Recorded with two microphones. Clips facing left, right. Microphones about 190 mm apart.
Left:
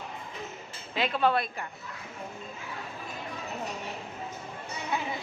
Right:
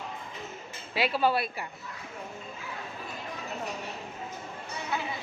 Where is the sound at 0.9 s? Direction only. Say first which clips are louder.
Even; 5° right (ahead or behind).